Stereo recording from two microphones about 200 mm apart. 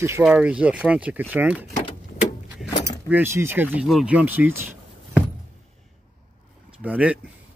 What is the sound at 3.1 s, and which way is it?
Speech, 10° right (ahead or behind).